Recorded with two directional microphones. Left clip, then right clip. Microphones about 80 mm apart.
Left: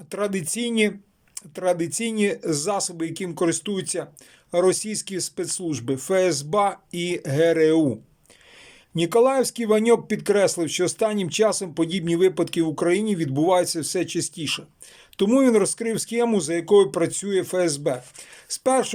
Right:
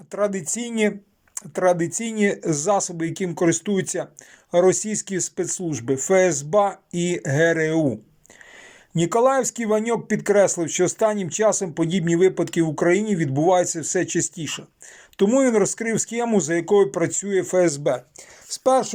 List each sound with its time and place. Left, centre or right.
0.1 s speech: left
9.0 s speech: centre
18.4 s a sound: centre